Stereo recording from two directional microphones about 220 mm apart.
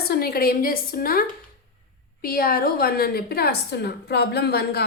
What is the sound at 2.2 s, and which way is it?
A woman's voice, 45° left (ahead or behind).